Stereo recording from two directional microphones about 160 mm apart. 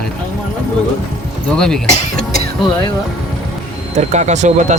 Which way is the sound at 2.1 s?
70° right (ahead or behind).